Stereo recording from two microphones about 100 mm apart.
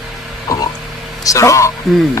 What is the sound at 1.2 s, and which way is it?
Speech, 30° left (ahead or behind).